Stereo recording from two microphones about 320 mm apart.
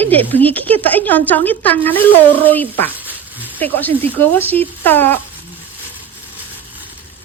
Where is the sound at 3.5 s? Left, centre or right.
Centre.